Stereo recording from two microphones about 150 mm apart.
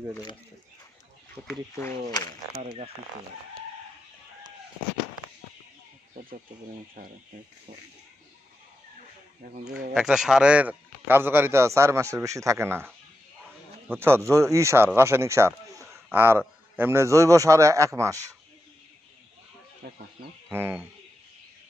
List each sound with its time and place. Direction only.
1.3 s speech: 15° left (ahead or behind)
7.0 s speech: 80° right
9.9 s a man's voice: 5° right (ahead or behind); by 18.2 s 20° right (ahead or behind)
19.8 s speech: 90° right
20.4 s a man's voice: 15° right (ahead or behind)